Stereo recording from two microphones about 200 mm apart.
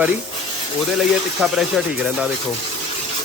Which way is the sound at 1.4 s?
Centre (ahead or behind).